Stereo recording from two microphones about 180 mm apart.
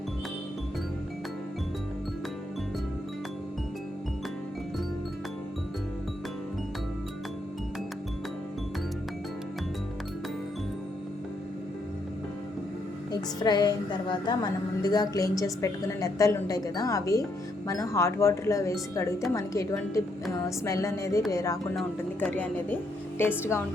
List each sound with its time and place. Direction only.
13.1 s a woman's voice: 25° left (ahead or behind)
21.8 s a woman's voice: 5° left (ahead or behind)